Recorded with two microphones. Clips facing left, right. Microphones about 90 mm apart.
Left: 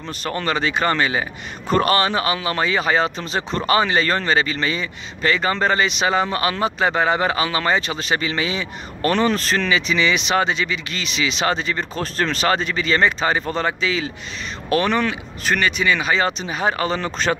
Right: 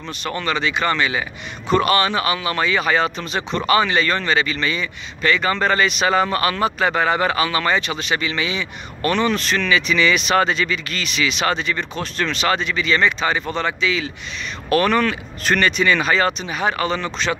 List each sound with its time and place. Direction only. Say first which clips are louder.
0.4 s speech: left 1 dB; 40° left (ahead or behind)
14.7 s speech: right 2 dB; 20° left (ahead or behind); by 17.4 s 40° left (ahead or behind)